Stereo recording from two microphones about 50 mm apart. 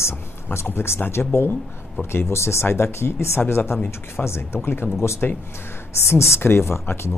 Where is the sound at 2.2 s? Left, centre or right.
Left.